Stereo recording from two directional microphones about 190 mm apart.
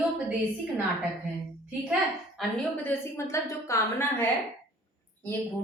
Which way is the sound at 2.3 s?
5° left (ahead or behind).